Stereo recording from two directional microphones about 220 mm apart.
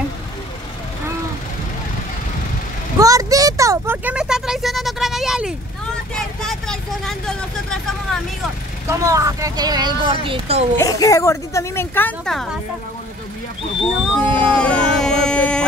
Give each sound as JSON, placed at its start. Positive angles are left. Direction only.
{"t": 3.0, "sound": "a sound", "side_deg": -15}
{"t": 6.1, "sound": "speech", "side_deg": 0}
{"t": 8.8, "sound": "speech", "side_deg": -15}
{"t": 10.8, "sound": "speech", "side_deg": 15}
{"t": 14.1, "sound": "speech", "side_deg": 5}